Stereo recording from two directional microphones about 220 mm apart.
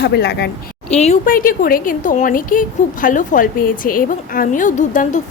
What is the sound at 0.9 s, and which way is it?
Speech, 30° left (ahead or behind).